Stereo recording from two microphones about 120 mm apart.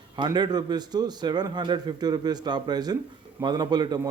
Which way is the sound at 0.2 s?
35° right (ahead or behind).